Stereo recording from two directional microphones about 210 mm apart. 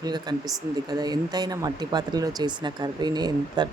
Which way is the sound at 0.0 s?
20° right (ahead or behind).